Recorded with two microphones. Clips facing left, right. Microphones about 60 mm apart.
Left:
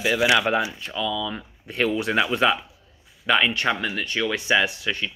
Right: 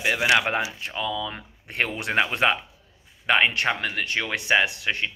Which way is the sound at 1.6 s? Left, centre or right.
Right.